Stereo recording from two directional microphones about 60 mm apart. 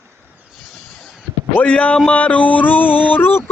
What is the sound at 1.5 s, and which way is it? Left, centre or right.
Speech, left.